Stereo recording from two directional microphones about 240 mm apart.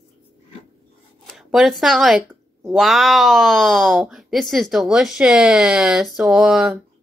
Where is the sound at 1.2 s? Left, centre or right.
Centre.